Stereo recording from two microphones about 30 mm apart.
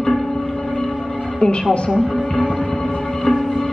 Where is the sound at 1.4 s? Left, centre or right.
Left.